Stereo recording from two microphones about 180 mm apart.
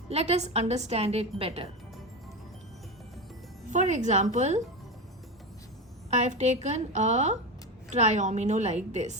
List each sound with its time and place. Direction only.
0.1 s a woman's voice: 35° right (ahead or behind)
3.7 s a woman's voice: 40° right (ahead or behind)
6.1 s a woman's voice: 40° right (ahead or behind)